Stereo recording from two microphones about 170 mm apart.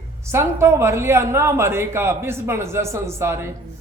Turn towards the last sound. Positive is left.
turn(degrees=-15)  # may be behind; listen again after turning